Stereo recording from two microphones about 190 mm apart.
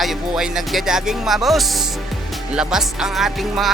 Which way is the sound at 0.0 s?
Centre (ahead or behind).